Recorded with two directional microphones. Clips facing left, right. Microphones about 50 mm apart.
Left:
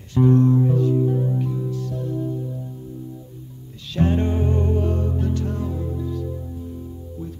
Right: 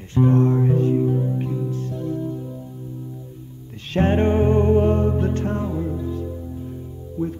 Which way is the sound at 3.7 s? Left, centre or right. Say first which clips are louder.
Right 2 dB; right.